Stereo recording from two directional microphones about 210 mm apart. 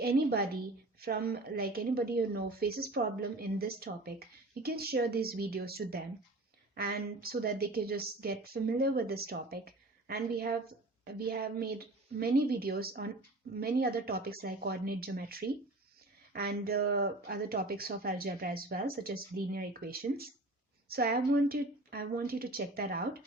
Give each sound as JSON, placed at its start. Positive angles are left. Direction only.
{"t": 0.0, "sound": "speech", "side_deg": -45}